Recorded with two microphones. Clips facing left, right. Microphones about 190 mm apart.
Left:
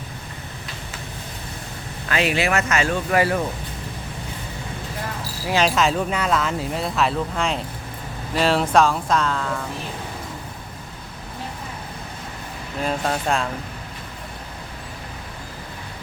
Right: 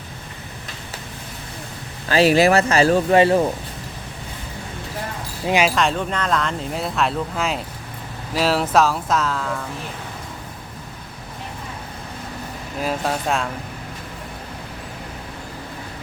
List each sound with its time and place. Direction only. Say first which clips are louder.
2.0 s speech: right 7 dB; 35° right (ahead or behind)
5.6 s speech: even; centre (ahead or behind)
12.8 s speech: even; centre (ahead or behind)